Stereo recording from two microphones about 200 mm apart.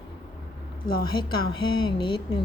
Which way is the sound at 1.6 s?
25° left (ahead or behind).